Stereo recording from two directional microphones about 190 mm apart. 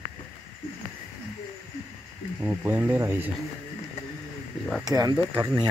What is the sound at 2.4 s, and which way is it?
Speech, 10° right (ahead or behind).